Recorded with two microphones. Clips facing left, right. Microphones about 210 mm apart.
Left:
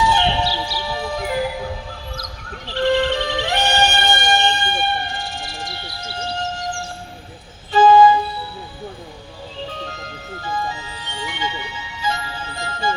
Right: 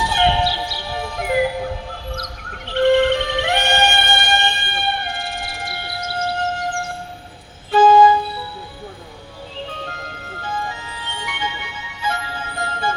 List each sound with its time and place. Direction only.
0.0 s music: 55° right (ahead or behind)
2.6 s music: 55° right (ahead or behind)
10.7 s music: 55° right (ahead or behind)